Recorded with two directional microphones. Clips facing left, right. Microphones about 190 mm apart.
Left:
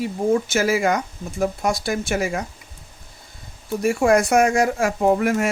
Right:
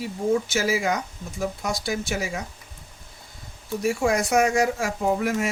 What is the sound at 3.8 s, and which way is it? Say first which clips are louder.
Speech: left 6 dB; 55° left (ahead or behind).